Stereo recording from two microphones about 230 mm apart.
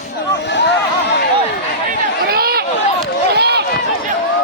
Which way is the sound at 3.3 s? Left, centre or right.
Right.